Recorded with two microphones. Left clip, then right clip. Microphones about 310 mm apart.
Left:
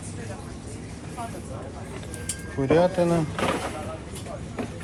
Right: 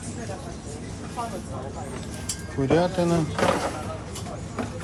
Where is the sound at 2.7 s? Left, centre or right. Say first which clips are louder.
Left 2 dB; centre.